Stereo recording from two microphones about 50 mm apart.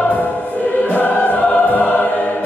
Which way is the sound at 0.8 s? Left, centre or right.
Left.